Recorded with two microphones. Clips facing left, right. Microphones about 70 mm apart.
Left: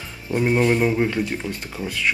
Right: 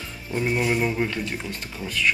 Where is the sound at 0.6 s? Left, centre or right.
Centre.